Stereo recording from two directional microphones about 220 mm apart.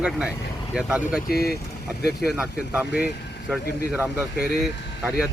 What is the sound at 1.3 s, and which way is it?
Speech, 45° left (ahead or behind).